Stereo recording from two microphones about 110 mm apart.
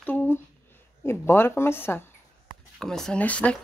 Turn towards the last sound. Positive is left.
turn(degrees=10)  # may be behind; listen again after turning